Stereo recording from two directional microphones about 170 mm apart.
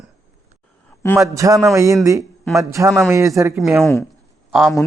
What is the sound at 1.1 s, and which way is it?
A man's voice, 20° right (ahead or behind).